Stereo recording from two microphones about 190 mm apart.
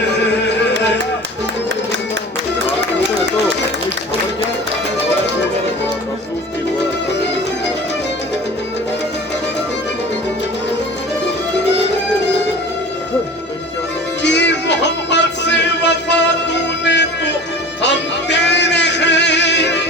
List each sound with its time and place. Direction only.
14.2 s music: 65° left (ahead or behind)